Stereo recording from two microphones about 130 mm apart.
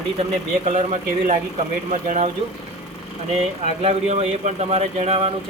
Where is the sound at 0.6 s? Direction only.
65° right (ahead or behind).